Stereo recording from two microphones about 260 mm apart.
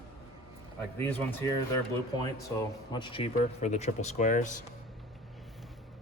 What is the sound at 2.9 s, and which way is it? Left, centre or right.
Speech, centre.